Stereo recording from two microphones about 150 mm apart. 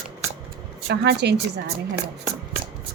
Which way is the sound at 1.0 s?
90° right.